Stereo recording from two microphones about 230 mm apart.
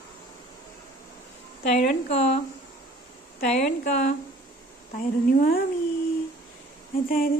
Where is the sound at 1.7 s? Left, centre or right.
Left.